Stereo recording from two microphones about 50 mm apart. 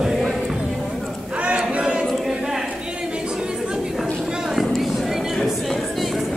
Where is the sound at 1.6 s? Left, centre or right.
Centre.